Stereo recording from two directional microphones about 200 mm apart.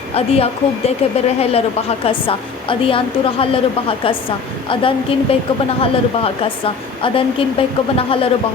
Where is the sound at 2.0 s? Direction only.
25° left (ahead or behind).